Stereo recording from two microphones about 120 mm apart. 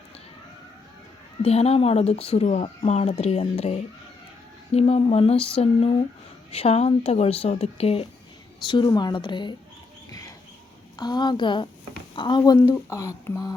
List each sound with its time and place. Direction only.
1.4 s speech: 60° left (ahead or behind)
8.6 s speech: 40° left (ahead or behind)
10.9 s speech: 35° left (ahead or behind)
12.4 s speech: 25° left (ahead or behind)